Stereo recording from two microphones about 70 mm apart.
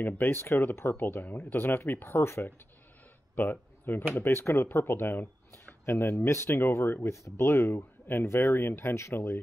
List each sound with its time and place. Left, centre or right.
0.0 s speech: left
3.3 s speech: left